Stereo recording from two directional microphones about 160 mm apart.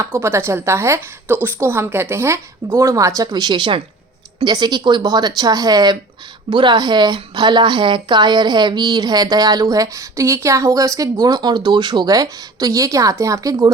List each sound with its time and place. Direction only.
0.0 s a woman's voice: 15° right (ahead or behind)